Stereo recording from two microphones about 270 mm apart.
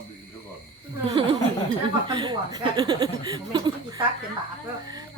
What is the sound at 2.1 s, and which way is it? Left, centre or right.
Speech, centre.